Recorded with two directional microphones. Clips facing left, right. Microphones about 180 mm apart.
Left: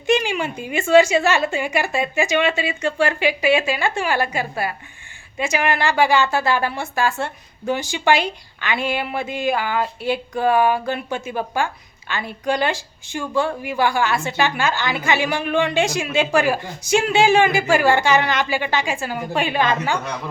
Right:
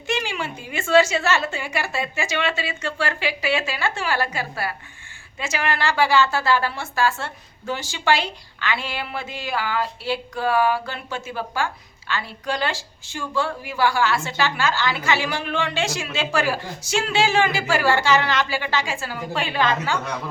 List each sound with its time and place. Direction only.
0.1 s a woman's voice: 15° left (ahead or behind)